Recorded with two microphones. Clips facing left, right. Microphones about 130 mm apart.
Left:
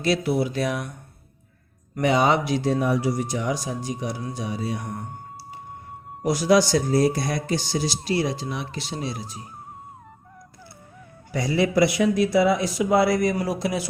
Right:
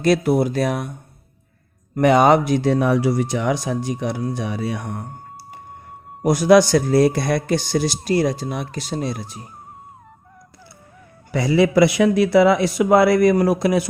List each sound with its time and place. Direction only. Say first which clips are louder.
0.0 s speech: right 6 dB; 50° right (ahead or behind)
2.0 s speech: right 6 dB; 55° right (ahead or behind)
2.6 s speech: right 4 dB; 70° right (ahead or behind)
6.2 s speech: right 6 dB; 55° right (ahead or behind)
11.3 s speech: right 6 dB; 85° right; by 13.8 s 55° right (ahead or behind)